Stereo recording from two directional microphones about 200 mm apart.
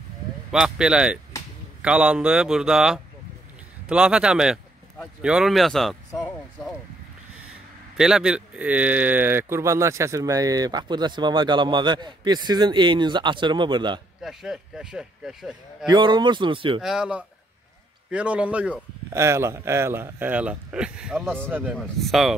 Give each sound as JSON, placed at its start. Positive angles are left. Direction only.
{"t": 0.5, "sound": "speech", "side_deg": -5}
{"t": 8.0, "sound": "speech", "side_deg": -5}
{"t": 14.2, "sound": "speech", "side_deg": 0}
{"t": 15.9, "sound": "speech", "side_deg": -25}
{"t": 16.8, "sound": "a man's voice", "side_deg": -5}